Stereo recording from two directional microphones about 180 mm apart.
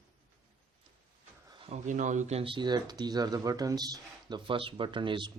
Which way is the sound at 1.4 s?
30° right (ahead or behind).